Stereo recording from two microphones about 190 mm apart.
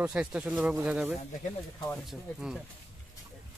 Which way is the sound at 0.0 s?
5° right (ahead or behind).